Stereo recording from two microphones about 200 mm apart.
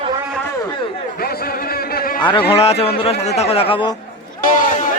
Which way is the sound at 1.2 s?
50° left (ahead or behind).